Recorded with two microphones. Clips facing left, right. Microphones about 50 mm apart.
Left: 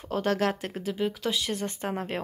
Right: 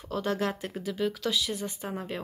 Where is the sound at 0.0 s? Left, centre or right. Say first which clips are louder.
Left 3 dB; left.